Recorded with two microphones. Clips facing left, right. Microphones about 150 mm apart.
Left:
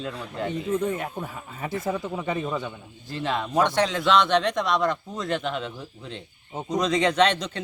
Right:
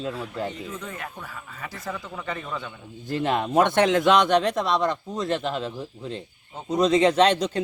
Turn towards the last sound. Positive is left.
turn(degrees=-35)  # may be behind; listen again after turning